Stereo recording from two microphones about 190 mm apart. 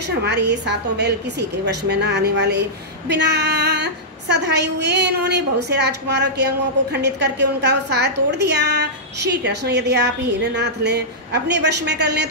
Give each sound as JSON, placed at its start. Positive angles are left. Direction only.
{"t": 0.2, "sound": "a woman's voice", "side_deg": -60}